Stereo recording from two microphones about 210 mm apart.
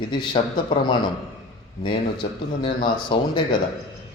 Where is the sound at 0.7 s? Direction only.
20° left (ahead or behind).